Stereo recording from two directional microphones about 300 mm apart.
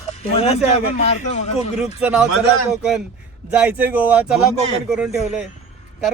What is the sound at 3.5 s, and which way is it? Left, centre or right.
Speech, centre.